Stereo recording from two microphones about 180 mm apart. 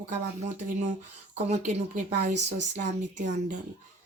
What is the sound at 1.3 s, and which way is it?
Speech, 40° right (ahead or behind).